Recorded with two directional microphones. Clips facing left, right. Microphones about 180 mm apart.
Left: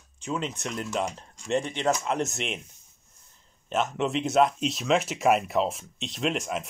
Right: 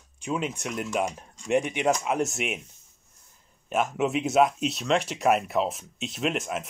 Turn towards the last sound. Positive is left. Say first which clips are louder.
# even
turn(degrees=-5)  # may be behind; listen again after turning